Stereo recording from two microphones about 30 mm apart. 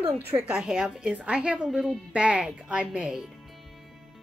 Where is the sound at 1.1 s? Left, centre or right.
Right.